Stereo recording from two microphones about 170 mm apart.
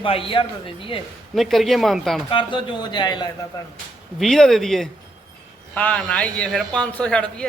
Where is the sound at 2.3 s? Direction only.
30° left (ahead or behind).